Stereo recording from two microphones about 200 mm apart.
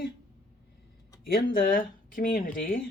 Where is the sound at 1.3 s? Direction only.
45° left (ahead or behind).